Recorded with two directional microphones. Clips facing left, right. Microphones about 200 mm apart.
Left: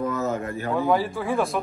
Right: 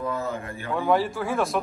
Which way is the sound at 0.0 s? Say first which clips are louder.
Left 4 dB; 45° left (ahead or behind).